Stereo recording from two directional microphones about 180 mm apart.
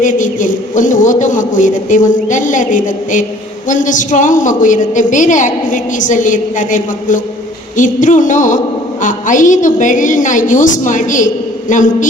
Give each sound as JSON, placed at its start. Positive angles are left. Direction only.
{"t": 0.0, "sound": "a woman's voice", "side_deg": 45}